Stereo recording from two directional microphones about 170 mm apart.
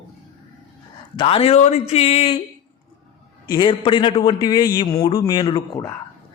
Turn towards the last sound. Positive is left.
turn(degrees=25)  # may be behind; listen again after turning